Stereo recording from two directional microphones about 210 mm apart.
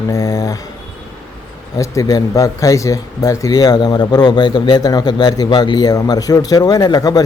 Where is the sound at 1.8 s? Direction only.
15° left (ahead or behind).